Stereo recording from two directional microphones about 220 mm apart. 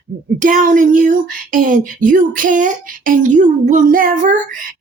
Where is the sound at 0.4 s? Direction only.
35° right (ahead or behind).